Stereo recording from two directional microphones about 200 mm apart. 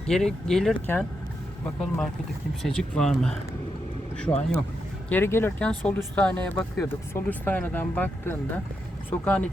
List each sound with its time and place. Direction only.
0.1 s speech: 5° left (ahead or behind)
2.6 s speech: 5° left (ahead or behind)